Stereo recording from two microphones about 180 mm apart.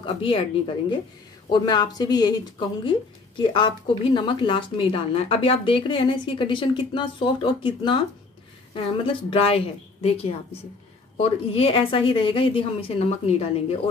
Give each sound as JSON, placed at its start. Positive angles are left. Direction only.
{"t": 0.0, "sound": "a woman's voice", "side_deg": 30}